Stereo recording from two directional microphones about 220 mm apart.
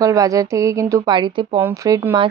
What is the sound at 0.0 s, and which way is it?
Speech, 15° right (ahead or behind).